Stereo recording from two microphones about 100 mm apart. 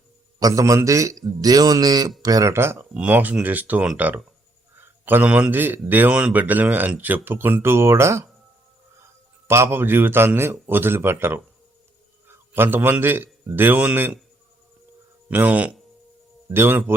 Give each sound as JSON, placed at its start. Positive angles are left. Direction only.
{"t": 0.3, "sound": "speech", "side_deg": -35}
{"t": 2.5, "sound": "a man's voice", "side_deg": -25}
{"t": 2.9, "sound": "a man's voice", "side_deg": -15}
{"t": 9.5, "sound": "a man's voice", "side_deg": -25}
{"t": 15.3, "sound": "a man's voice", "side_deg": -15}